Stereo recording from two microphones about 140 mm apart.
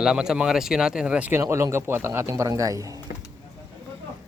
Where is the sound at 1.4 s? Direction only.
20° right (ahead or behind).